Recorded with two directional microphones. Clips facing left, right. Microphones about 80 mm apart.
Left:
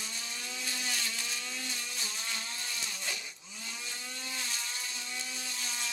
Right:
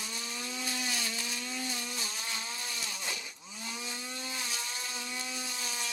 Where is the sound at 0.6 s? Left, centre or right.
Centre.